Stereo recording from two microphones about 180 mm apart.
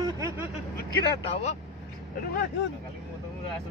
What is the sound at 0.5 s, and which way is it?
Speech, 35° left (ahead or behind).